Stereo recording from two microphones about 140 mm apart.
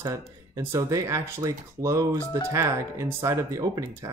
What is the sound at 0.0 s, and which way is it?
Speech, 20° right (ahead or behind).